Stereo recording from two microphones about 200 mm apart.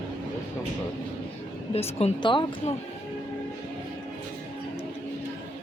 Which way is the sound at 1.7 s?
30° left (ahead or behind).